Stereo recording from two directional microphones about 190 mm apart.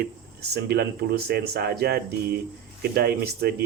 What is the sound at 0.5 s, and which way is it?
Speech, 60° right (ahead or behind).